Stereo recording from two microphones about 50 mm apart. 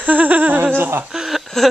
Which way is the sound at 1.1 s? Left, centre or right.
Centre.